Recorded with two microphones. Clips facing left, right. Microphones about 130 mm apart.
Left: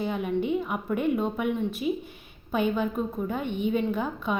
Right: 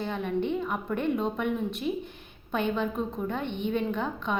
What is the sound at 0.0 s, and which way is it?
A woman's voice, 10° left (ahead or behind).